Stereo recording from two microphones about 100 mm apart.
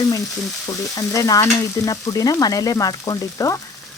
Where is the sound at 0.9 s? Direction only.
35° left (ahead or behind).